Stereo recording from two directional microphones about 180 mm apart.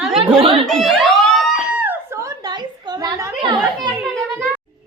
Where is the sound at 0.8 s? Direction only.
Centre (ahead or behind); by 3.9 s 25° right (ahead or behind).